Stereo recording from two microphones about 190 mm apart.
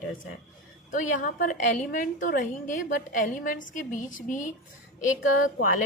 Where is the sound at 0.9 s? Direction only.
40° left (ahead or behind).